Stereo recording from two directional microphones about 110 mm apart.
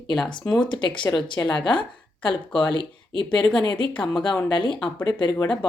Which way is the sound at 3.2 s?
10° left (ahead or behind).